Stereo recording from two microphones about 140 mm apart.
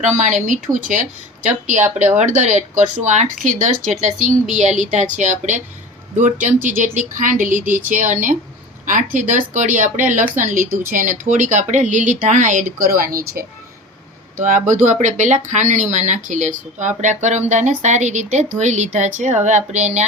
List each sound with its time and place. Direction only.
0.0 s speech: 60° right (ahead or behind); by 13.4 s 90° right
14.3 s speech: 65° right (ahead or behind)